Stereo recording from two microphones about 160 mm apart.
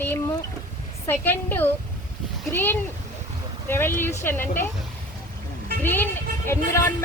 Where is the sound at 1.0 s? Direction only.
15° left (ahead or behind).